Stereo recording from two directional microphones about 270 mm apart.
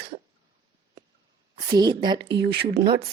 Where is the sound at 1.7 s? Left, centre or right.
Centre.